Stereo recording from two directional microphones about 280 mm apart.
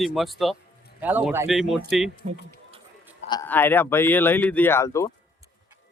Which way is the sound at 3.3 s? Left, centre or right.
Centre.